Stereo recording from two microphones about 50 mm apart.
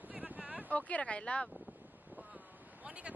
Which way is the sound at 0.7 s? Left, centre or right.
Left.